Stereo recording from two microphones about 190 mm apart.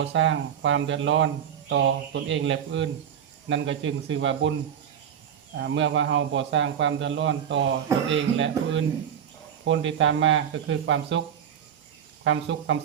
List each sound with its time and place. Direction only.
0.0 s speech: 70° right (ahead or behind)
1.7 s speech: 70° right (ahead or behind)
5.5 s speech: 75° right (ahead or behind)
12.2 s speech: 80° right